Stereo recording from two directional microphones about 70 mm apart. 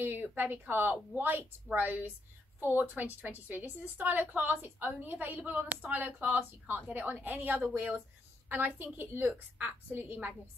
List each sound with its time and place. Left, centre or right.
0.0 s a woman's voice: right